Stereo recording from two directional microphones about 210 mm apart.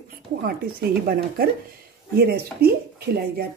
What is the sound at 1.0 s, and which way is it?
A woman's voice, 45° right (ahead or behind).